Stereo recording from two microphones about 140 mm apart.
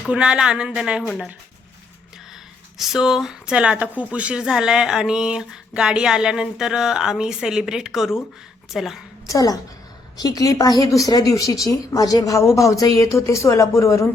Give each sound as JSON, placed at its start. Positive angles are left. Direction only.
{"t": 0.0, "sound": "speech", "side_deg": -5}
{"t": 1.0, "sound": "speech", "side_deg": 5}
{"t": 2.7, "sound": "speech", "side_deg": -5}
{"t": 9.2, "sound": "speech", "side_deg": 25}